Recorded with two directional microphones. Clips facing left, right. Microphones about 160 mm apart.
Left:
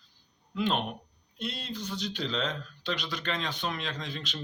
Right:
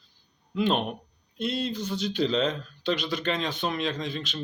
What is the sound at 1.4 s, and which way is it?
Speech, 5° right (ahead or behind).